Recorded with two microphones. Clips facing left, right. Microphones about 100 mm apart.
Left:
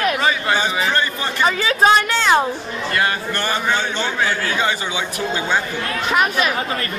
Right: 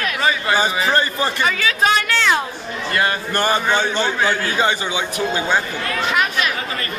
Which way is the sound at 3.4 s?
15° right (ahead or behind).